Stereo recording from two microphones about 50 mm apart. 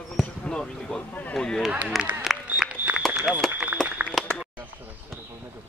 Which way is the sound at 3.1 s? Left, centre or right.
Right.